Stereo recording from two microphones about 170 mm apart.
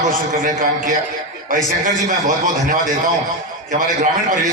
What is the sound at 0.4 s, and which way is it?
A man's voice, 50° right (ahead or behind).